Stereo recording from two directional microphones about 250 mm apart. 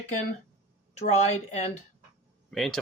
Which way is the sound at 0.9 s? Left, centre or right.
Left.